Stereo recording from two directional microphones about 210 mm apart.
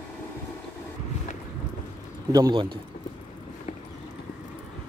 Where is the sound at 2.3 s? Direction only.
20° right (ahead or behind).